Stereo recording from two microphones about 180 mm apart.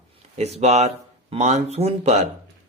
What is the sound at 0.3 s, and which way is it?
Speech, 35° right (ahead or behind).